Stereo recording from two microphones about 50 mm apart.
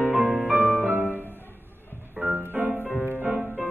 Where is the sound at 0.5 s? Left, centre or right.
Right.